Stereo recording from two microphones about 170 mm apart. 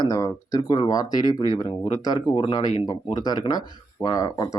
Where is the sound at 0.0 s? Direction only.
20° left (ahead or behind).